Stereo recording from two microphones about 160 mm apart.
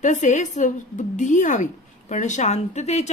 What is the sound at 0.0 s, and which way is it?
A woman's voice, 50° left (ahead or behind).